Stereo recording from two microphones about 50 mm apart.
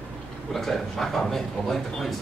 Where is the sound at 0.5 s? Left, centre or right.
Centre.